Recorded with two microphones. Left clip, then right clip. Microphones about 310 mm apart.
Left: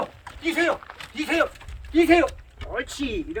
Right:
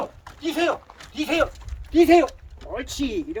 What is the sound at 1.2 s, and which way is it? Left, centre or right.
Speech, right.